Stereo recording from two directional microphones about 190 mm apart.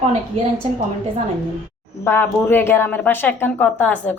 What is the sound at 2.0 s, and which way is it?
A woman's voice, 10° left (ahead or behind).